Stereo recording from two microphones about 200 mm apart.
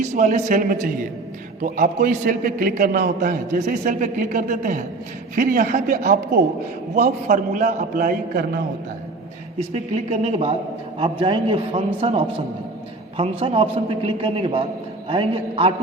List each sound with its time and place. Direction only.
0.0 s a man's voice: 35° right (ahead or behind)
9.6 s a man's voice: 35° right (ahead or behind)